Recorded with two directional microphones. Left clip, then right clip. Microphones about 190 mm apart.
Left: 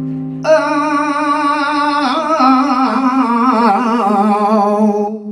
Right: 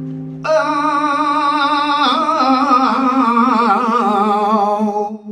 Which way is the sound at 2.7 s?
35° left (ahead or behind).